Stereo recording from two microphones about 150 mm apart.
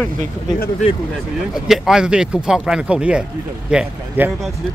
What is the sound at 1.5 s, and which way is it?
Speech, 5° right (ahead or behind).